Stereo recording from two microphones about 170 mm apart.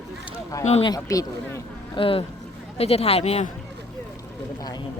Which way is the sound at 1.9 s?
30° left (ahead or behind).